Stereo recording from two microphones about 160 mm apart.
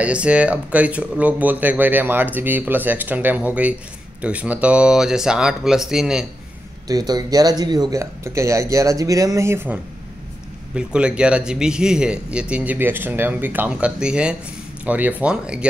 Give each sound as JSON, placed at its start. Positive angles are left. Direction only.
{"t": 0.0, "sound": "speech", "side_deg": -10}
{"t": 6.9, "sound": "speech", "side_deg": -25}